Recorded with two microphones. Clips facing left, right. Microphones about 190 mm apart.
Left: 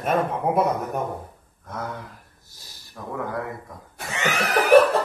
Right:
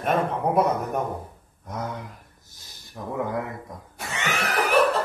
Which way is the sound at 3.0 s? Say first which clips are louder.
Right 2 dB; 20° right (ahead or behind).